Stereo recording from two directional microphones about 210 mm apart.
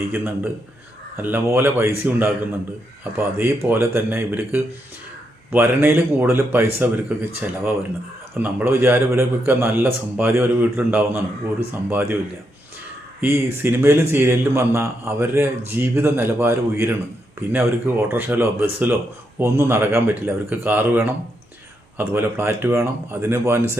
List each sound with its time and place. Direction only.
0.1 s a man's voice: 10° right (ahead or behind)
13.2 s a man's voice: 10° right (ahead or behind)